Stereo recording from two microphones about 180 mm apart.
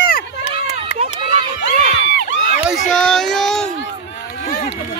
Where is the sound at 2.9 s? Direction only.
5° left (ahead or behind).